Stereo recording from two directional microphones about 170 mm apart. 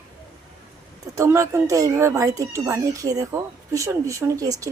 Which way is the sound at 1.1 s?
15° right (ahead or behind).